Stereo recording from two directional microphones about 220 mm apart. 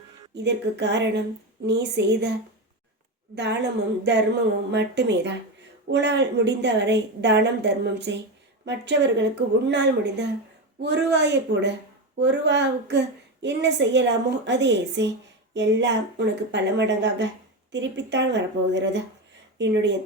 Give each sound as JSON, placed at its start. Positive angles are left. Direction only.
{"t": 0.3, "sound": "speech", "side_deg": -50}
{"t": 3.3, "sound": "speech", "side_deg": -50}